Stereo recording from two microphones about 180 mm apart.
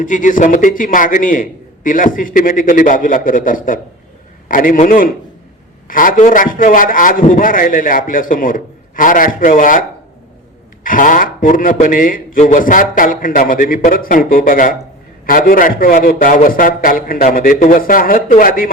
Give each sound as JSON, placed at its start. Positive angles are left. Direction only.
{"t": 0.0, "sound": "a man's voice", "side_deg": 45}
{"t": 10.8, "sound": "a man's voice", "side_deg": 50}